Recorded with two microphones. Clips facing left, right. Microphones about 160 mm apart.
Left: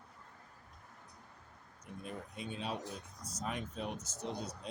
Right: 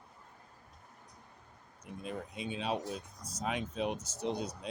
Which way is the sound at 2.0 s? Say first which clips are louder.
Right 5 dB; 90° right.